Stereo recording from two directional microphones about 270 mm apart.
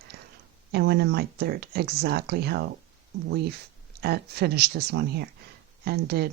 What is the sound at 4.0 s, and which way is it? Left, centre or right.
Speech, right.